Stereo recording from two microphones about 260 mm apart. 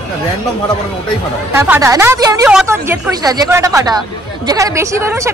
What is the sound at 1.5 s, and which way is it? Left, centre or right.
Speech, centre.